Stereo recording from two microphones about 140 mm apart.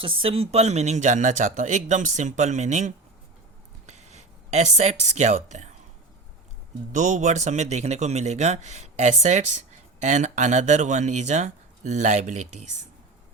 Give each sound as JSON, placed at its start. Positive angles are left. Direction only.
{"t": 0.0, "sound": "speech", "side_deg": -40}
{"t": 6.9, "sound": "speech", "side_deg": -60}